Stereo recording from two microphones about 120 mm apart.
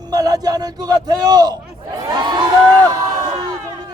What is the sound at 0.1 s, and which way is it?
A man's voice, 30° right (ahead or behind).